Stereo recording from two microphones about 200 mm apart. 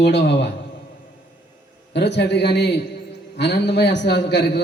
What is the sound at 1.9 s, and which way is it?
A man's voice, 60° left (ahead or behind).